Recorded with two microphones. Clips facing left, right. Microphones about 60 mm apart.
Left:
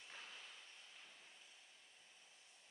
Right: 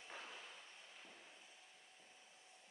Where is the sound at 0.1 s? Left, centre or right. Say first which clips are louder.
Right 4 dB; right.